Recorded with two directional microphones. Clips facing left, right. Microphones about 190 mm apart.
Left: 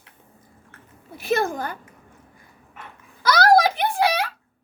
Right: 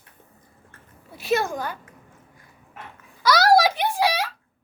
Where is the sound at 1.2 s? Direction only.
50° left (ahead or behind).